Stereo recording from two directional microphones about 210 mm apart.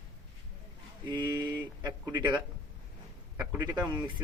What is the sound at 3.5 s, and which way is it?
Speech, 5° right (ahead or behind).